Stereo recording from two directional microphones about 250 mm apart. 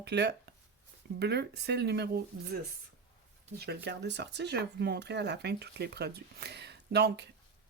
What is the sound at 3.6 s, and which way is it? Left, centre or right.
A woman's voice, right.